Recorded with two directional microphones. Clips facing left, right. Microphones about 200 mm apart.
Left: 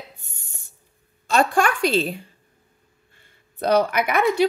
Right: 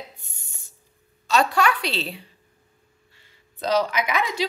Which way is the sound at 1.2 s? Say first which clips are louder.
Left 1 dB; 50° left (ahead or behind).